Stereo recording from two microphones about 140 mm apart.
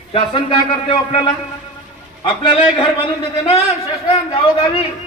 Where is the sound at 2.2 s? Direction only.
35° left (ahead or behind).